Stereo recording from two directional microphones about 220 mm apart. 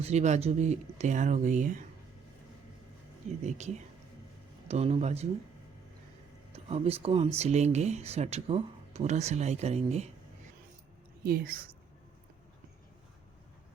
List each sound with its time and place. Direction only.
0.0 s speech: 30° right (ahead or behind)
3.4 s speech: 30° right (ahead or behind)
6.5 s speech: 30° right (ahead or behind)
11.2 s speech: 45° right (ahead or behind)